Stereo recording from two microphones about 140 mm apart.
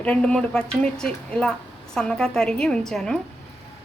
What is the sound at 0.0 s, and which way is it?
A woman's voice, 10° left (ahead or behind).